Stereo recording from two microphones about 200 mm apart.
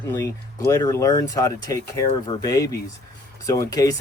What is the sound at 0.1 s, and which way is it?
Speech, 15° left (ahead or behind).